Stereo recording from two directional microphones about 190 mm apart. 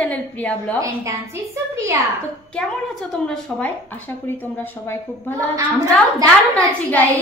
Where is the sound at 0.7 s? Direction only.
15° right (ahead or behind).